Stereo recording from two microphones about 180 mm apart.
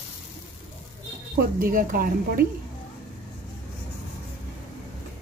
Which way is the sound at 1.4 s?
50° right (ahead or behind).